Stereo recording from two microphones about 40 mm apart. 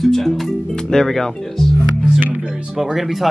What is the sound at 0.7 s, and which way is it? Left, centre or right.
Speech, centre.